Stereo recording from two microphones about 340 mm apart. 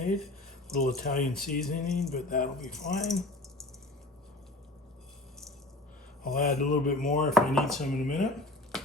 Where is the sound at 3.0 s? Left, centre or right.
Centre.